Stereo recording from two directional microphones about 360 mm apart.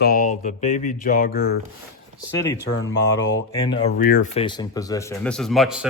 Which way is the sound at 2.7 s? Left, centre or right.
Left.